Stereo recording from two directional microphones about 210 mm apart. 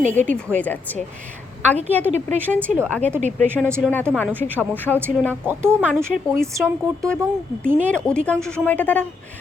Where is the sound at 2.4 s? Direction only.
5° left (ahead or behind).